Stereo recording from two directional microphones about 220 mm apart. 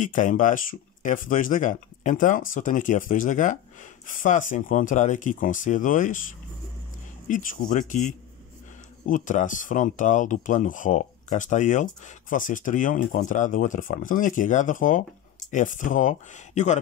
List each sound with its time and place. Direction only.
0.0 s speech: 35° left (ahead or behind)
7.2 s speech: 35° left (ahead or behind)